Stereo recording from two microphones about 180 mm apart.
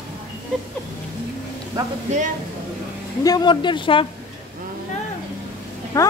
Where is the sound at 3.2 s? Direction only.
25° left (ahead or behind).